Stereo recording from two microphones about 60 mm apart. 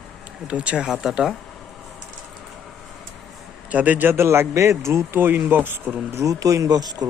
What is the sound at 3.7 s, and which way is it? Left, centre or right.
Speech, right.